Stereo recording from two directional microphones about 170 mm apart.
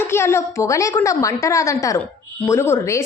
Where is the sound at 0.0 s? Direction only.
15° left (ahead or behind).